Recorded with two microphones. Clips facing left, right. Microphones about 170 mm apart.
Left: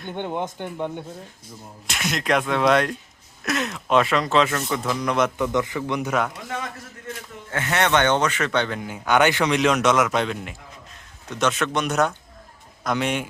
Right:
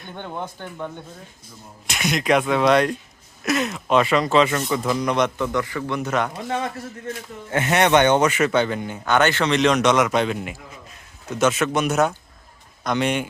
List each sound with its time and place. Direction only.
0.2 s a man's voice: 20° left (ahead or behind)
1.9 s speech: centre (ahead or behind)
5.4 s a man's voice: 20° left (ahead or behind)
6.1 s speech: 5° left (ahead or behind)
7.5 s a man's voice: 20° right (ahead or behind); by 13.2 s centre (ahead or behind)